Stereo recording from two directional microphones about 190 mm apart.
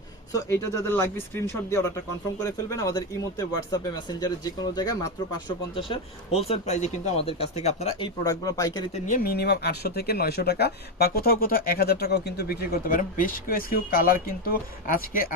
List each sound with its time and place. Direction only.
0.3 s speech: 15° left (ahead or behind); by 8.1 s 35° left (ahead or behind)
8.2 s speech: 20° left (ahead or behind)
9.0 s speech: 50° left (ahead or behind)